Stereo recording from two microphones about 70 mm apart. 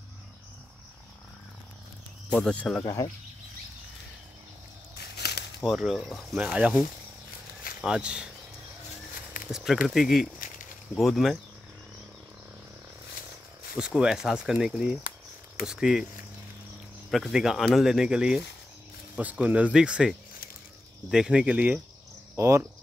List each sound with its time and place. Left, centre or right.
2.5 s speech: centre
2.8 s speech: left
5.7 s speech: centre
6.3 s speech: centre
7.8 s speech: centre
9.5 s speech: centre
13.7 s speech: centre
17.1 s speech: centre
21.1 s speech: centre
22.3 s speech: right